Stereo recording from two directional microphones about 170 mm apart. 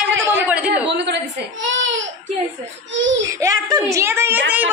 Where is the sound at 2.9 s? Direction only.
90° right.